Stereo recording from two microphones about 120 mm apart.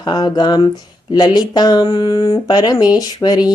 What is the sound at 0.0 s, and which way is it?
Speech, 35° left (ahead or behind).